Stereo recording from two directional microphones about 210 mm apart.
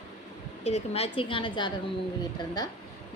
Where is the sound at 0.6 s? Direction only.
30° left (ahead or behind).